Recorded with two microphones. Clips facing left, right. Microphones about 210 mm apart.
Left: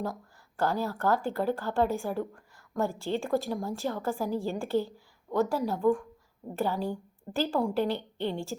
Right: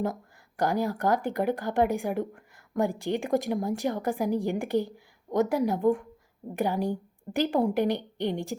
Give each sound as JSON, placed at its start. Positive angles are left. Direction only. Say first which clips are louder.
{"t": 0.0, "sound": "speech", "louder": "right 4 dB", "side_deg": -20}